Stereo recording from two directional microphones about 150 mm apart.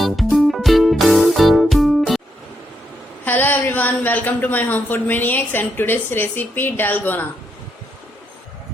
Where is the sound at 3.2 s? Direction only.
10° left (ahead or behind).